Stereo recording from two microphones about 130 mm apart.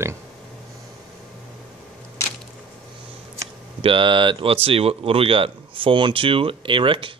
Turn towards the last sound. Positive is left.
turn(degrees=-40)  # may be behind; listen again after turning